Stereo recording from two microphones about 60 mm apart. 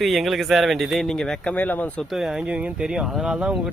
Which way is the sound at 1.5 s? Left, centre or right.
Left.